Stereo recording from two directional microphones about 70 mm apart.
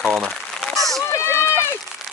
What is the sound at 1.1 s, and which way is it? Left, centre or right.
Run, left.